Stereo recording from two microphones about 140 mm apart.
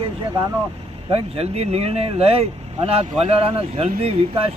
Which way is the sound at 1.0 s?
45° right (ahead or behind).